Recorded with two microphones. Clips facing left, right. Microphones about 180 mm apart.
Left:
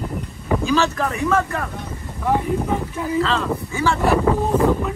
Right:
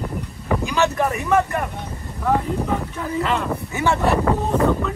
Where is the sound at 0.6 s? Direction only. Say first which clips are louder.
Even; 20° right (ahead or behind).